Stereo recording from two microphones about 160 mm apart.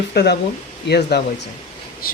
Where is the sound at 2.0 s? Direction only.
65° left (ahead or behind).